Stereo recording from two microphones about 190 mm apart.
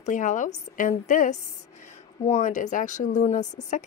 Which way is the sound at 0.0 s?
40° left (ahead or behind).